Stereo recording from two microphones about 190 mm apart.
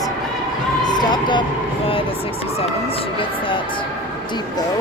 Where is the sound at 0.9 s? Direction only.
20° left (ahead or behind).